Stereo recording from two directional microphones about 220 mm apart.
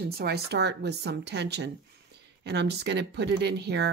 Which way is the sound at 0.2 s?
45° right (ahead or behind).